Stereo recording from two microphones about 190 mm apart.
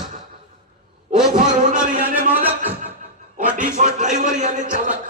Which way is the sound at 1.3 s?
45° right (ahead or behind).